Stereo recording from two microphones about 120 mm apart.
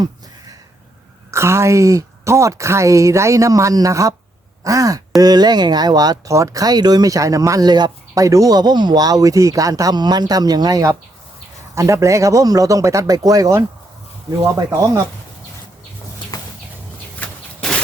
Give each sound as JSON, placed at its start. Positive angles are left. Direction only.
{"t": 1.3, "sound": "speech", "side_deg": -25}
{"t": 16.3, "sound": "chicken", "side_deg": 35}